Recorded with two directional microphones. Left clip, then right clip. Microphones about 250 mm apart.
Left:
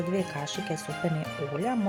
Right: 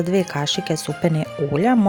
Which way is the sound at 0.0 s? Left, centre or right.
Right.